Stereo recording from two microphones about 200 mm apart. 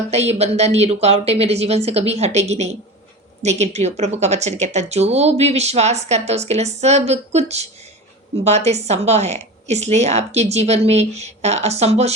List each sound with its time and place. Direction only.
0.1 s speech: 35° right (ahead or behind)